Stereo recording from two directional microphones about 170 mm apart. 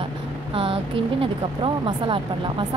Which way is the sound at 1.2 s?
30° right (ahead or behind).